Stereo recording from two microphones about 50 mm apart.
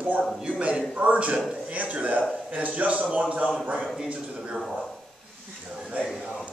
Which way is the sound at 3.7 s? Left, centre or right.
Centre.